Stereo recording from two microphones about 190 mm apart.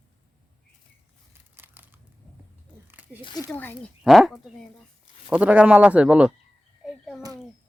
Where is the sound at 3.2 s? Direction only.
25° left (ahead or behind).